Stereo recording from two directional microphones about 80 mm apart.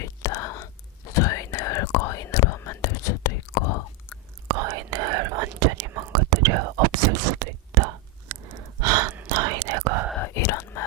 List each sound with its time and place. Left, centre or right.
0.0 s whispering: left
4.4 s whispering: right
8.8 s gasp: right
9.3 s whispering: right
10.2 s whispering: left